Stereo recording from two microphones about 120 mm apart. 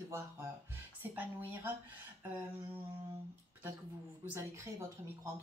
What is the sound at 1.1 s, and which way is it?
Speech, 15° right (ahead or behind).